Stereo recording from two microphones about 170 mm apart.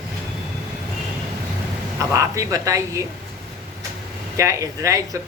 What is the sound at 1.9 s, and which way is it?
Speech, 20° right (ahead or behind).